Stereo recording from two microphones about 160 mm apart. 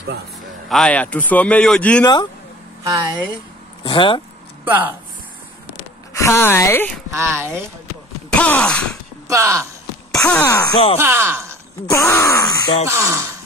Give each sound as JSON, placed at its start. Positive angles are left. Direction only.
{"t": 0.7, "sound": "speech", "side_deg": 5}
{"t": 2.8, "sound": "speech", "side_deg": -20}
{"t": 3.8, "sound": "speech", "side_deg": 30}
{"t": 4.6, "sound": "speech", "side_deg": -10}
{"t": 6.1, "sound": "speech", "side_deg": 15}
{"t": 7.1, "sound": "speech", "side_deg": -15}
{"t": 8.3, "sound": "a sound", "side_deg": 5}
{"t": 9.3, "sound": "speech", "side_deg": -15}
{"t": 10.3, "sound": "speech", "side_deg": 15}
{"t": 11.0, "sound": "speech", "side_deg": -15}
{"t": 11.9, "sound": "speech", "side_deg": 15}
{"t": 12.8, "sound": "speech", "side_deg": -20}